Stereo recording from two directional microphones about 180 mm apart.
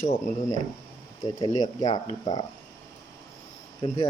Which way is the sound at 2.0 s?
25° left (ahead or behind).